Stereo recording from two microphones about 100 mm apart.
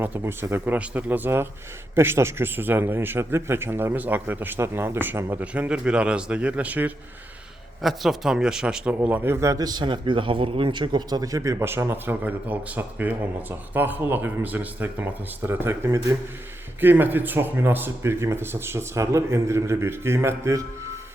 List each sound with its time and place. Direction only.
0.0 s a man's voice: 20° right (ahead or behind)
7.8 s a man's voice: centre (ahead or behind); by 20.7 s 30° right (ahead or behind)